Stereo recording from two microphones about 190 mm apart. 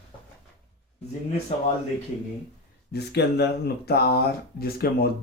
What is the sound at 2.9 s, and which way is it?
Speech, 60° left (ahead or behind).